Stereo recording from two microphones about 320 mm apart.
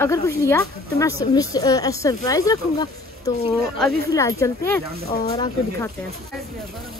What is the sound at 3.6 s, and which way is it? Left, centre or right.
Speech, centre.